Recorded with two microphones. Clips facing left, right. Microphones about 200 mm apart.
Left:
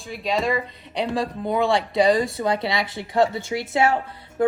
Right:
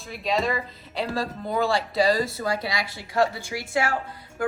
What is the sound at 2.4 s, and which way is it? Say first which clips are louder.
A woman's voice: left 4 dB; 25° left (ahead or behind).